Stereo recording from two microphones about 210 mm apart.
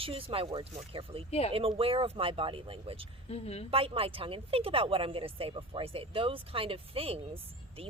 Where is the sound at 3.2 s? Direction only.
30° left (ahead or behind).